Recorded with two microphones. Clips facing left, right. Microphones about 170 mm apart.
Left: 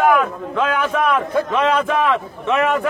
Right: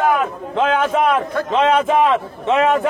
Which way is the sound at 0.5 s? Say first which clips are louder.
Right 3 dB; 20° right (ahead or behind).